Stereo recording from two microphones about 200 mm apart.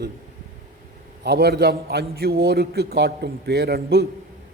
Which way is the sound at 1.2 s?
55° right (ahead or behind).